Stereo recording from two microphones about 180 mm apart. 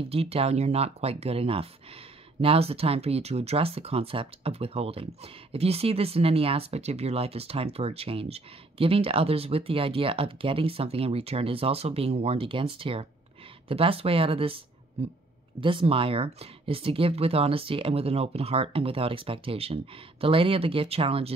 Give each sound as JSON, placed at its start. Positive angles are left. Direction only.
{"t": 0.1, "sound": "speech", "side_deg": -35}